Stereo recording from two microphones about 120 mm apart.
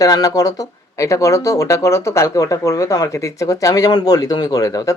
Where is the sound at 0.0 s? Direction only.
30° left (ahead or behind).